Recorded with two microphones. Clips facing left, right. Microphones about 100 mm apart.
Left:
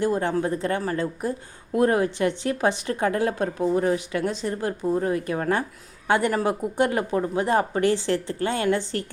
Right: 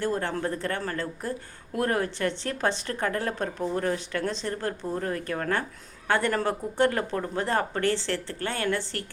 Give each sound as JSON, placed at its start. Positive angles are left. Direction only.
{"t": 0.0, "sound": "speech", "side_deg": 15}